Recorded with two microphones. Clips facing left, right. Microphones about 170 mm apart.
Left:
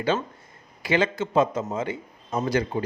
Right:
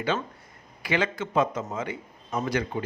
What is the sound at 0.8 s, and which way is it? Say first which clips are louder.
A man's voice: left 4 dB; 30° left (ahead or behind).